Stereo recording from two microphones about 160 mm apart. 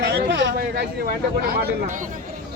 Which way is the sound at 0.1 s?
90° right.